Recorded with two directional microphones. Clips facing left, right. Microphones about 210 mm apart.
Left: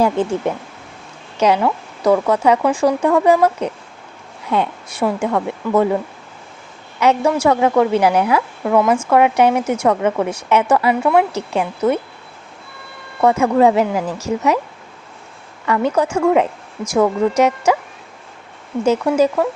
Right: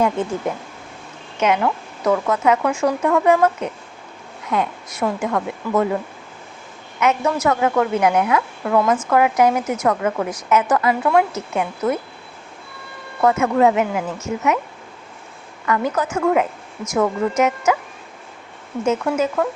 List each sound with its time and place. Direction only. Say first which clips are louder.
0.0 s a woman's voice: left 3 dB; 30° left (ahead or behind)
7.0 s a woman's voice: left 4 dB; 30° left (ahead or behind)
13.2 s speech: left 3 dB; 30° left (ahead or behind)
15.6 s a woman's voice: left 4 dB; 30° left (ahead or behind)
18.9 s speech: left 5 dB; 35° left (ahead or behind)